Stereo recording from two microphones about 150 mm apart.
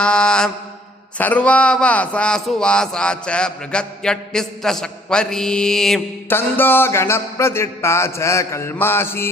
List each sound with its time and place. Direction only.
0.0 s mantra: 5° left (ahead or behind)
1.2 s speech: 10° left (ahead or behind)
6.2 s a sound: 15° left (ahead or behind)